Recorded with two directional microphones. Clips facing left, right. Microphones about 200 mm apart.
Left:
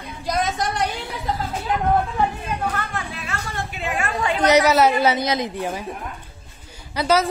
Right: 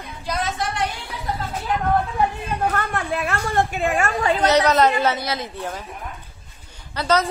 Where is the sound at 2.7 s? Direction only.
55° right (ahead or behind).